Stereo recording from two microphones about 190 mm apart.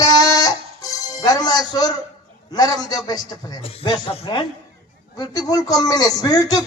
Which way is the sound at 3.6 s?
30° left (ahead or behind).